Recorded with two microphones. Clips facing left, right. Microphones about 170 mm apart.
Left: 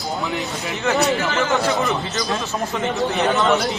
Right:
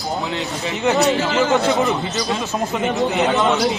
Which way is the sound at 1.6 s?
20° right (ahead or behind).